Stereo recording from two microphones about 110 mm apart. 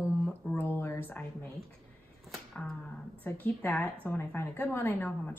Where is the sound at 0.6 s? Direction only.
20° left (ahead or behind).